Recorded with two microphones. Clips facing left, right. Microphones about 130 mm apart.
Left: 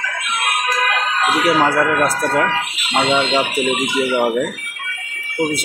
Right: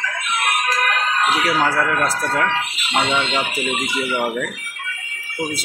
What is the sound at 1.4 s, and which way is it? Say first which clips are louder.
Speech: left 4 dB; 25° left (ahead or behind).